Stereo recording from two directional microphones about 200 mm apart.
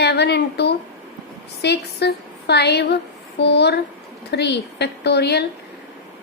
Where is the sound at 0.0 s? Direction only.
55° left (ahead or behind).